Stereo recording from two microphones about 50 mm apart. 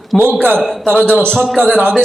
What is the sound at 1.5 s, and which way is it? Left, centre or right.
Speech, centre.